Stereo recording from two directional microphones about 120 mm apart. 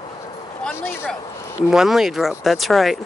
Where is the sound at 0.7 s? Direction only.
20° left (ahead or behind).